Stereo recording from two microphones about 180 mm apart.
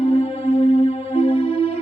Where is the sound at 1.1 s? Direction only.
30° left (ahead or behind).